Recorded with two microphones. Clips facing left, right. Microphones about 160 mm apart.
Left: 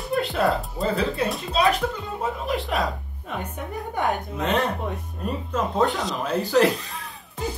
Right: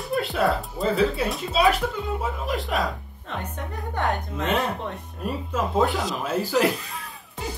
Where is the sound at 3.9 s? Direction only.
10° left (ahead or behind).